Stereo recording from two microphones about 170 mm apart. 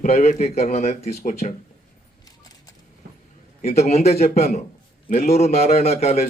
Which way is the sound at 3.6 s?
40° left (ahead or behind).